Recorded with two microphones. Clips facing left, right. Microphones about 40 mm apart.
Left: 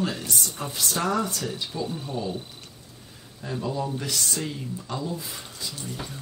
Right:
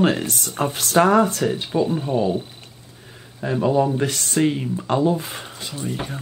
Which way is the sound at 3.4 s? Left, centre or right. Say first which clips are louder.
Right 11 dB; right.